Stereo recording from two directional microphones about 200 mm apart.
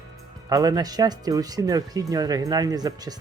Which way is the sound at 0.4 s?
20° right (ahead or behind).